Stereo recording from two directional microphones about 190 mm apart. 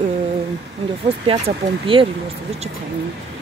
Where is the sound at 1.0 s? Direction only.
30° right (ahead or behind).